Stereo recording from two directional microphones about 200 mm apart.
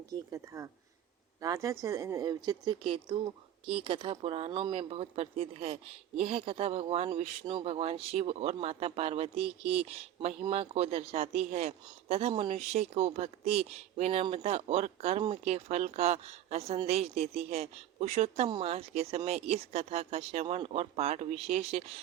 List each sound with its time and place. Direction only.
0.1 s speech: 15° right (ahead or behind); by 22.0 s 30° right (ahead or behind)